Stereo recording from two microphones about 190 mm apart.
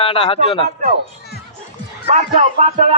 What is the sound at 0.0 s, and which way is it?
Speech, 30° left (ahead or behind).